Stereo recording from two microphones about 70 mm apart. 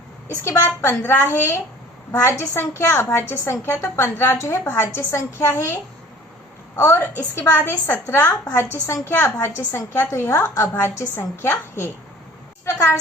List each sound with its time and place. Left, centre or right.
0.6 s a woman's voice: left
6.7 s a woman's voice: left
7.3 s a woman's voice: left
12.6 s a woman's voice: left